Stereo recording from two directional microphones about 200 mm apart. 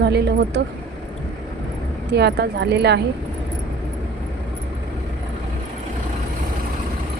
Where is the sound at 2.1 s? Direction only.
55° right (ahead or behind).